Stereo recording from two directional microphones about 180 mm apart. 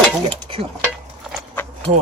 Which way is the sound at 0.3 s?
30° right (ahead or behind).